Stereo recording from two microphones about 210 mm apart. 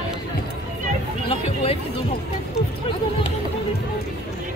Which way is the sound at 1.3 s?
25° left (ahead or behind).